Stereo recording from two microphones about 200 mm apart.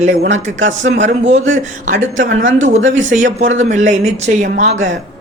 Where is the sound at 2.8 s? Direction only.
70° right (ahead or behind).